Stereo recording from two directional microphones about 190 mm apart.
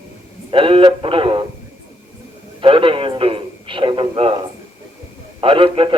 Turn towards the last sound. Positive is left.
turn(degrees=-30)  # may be behind; listen again after turning